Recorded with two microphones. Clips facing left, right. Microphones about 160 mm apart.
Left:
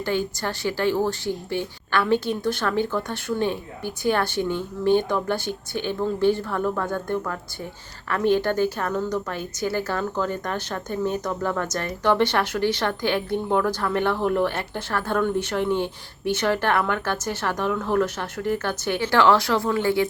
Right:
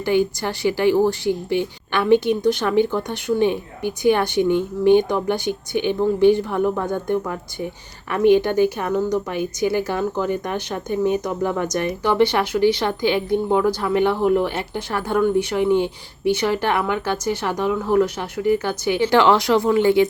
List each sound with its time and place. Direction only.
0.0 s a woman's voice: 15° right (ahead or behind)